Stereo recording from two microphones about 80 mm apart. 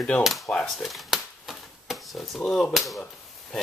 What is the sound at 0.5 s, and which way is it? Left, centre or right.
Typewriter, centre.